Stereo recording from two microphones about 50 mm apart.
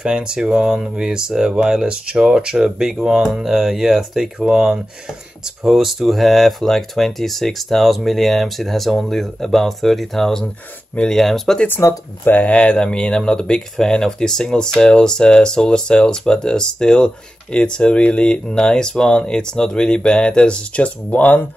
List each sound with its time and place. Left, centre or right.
0.0 s speech: centre
11.8 s speech: left
12.3 s speech: left